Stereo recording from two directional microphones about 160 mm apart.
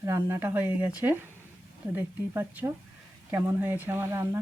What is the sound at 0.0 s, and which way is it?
Speech, 15° right (ahead or behind).